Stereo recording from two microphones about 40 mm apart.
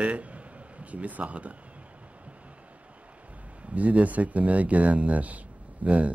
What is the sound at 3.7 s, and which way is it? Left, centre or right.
Speech, right.